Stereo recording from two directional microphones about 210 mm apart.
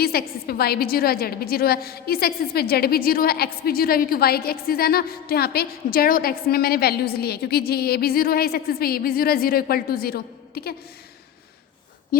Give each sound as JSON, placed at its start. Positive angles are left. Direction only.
{"t": 0.0, "sound": "a woman's voice", "side_deg": 45}